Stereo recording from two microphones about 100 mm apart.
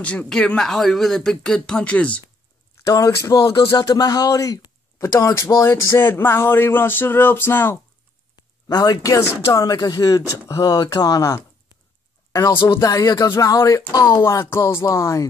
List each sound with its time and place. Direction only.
0.0 s speech: 10° left (ahead or behind)
2.8 s speech: 35° left (ahead or behind)
8.6 s speech: 40° left (ahead or behind)